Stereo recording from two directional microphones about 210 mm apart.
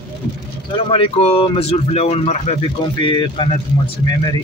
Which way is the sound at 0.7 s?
25° left (ahead or behind).